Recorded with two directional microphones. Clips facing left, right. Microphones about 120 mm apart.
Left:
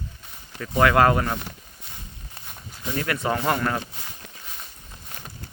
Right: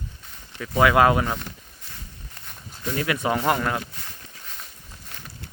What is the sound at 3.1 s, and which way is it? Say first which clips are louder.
Speech: right 1 dB; 15° right (ahead or behind).